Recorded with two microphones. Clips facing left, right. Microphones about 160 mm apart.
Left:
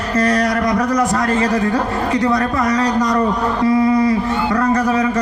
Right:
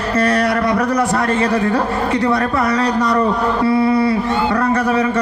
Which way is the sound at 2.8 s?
35° left (ahead or behind).